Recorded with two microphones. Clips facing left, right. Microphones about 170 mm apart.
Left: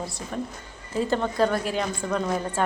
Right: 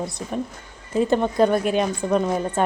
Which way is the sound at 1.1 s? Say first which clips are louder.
Right 4 dB; 15° right (ahead or behind).